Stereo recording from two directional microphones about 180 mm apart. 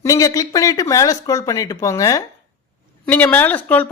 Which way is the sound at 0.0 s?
20° left (ahead or behind).